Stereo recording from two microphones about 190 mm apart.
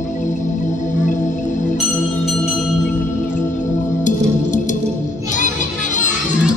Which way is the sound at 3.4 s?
40° left (ahead or behind).